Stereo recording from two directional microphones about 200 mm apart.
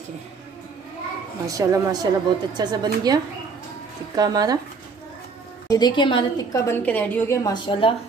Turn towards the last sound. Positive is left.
turn(degrees=25)  # may be behind; listen again after turning